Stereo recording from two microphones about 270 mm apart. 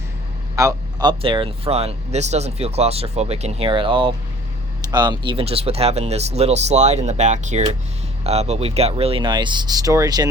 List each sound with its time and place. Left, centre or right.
0.5 s speech: centre